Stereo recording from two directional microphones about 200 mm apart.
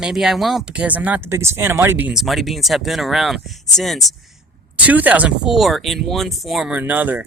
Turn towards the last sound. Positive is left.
turn(degrees=-10)  # may be behind; listen again after turning